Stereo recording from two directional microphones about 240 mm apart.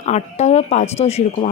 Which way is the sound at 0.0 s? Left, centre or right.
Left.